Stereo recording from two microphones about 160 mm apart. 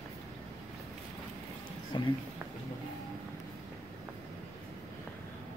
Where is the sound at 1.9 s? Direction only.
25° left (ahead or behind).